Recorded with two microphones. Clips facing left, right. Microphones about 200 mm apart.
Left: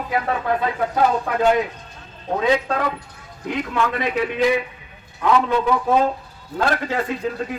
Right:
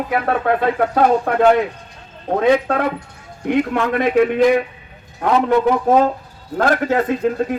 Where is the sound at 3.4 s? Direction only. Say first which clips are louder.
Right 5 dB; 55° right (ahead or behind).